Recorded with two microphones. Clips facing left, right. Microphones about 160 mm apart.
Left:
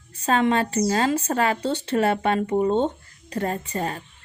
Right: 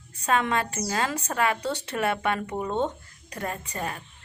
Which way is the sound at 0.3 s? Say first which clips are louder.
Left 4 dB; 30° left (ahead or behind).